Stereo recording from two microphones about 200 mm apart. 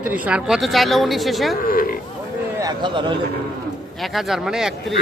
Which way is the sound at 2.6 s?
20° right (ahead or behind).